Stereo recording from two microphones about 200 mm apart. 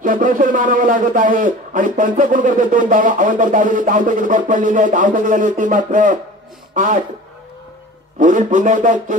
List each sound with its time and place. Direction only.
0.0 s a man's voice: 40° right (ahead or behind)
8.2 s a man's voice: 40° right (ahead or behind)